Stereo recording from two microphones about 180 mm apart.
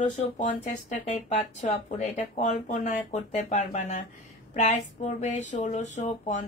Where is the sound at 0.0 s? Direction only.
45° left (ahead or behind).